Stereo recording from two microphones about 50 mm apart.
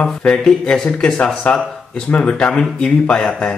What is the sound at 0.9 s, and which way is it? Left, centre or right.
Speech, centre.